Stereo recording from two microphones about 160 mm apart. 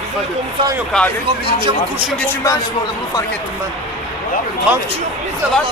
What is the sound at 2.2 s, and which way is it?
Speech, 20° left (ahead or behind).